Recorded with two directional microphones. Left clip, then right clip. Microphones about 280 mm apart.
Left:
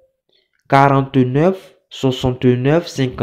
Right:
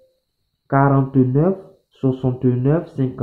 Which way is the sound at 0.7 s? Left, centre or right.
Left.